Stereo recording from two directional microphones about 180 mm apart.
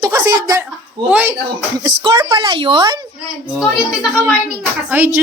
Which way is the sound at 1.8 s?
20° right (ahead or behind).